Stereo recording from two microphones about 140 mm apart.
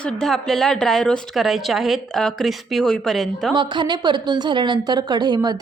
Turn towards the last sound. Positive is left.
turn(degrees=-30)  # may be behind; listen again after turning